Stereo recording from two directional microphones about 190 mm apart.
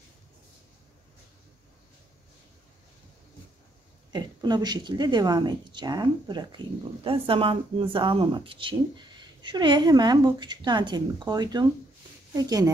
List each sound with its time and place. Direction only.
4.1 s speech: 20° right (ahead or behind)